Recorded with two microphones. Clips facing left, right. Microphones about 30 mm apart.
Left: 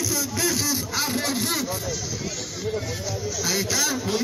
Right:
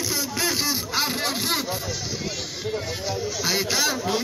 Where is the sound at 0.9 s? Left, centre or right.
Right.